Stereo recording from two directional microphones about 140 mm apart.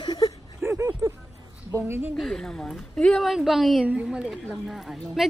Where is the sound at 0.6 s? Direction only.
15° right (ahead or behind).